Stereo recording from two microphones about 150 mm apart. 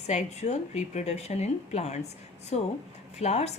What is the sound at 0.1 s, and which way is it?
A woman's voice, 50° left (ahead or behind).